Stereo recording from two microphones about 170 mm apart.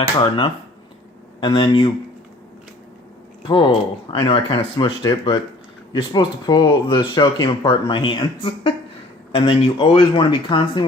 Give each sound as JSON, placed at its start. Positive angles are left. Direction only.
{"t": 0.2, "sound": "speech", "side_deg": 30}
{"t": 3.4, "sound": "speech", "side_deg": 30}